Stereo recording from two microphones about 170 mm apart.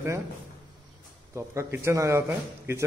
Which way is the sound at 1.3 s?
15° right (ahead or behind).